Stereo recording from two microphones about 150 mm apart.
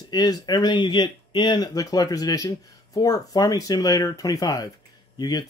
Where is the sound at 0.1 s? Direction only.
25° left (ahead or behind).